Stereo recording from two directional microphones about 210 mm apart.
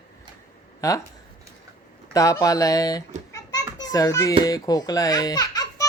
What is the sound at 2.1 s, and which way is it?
A child's voice, 15° left (ahead or behind).